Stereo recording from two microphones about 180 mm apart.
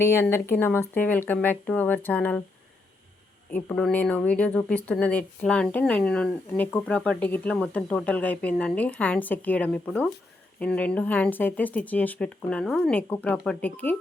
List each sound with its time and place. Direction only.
0.0 s speech: 15° left (ahead or behind)
3.5 s speech: 5° left (ahead or behind)